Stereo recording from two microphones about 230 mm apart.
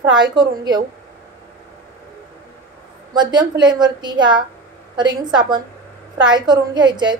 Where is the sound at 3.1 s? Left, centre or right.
Centre.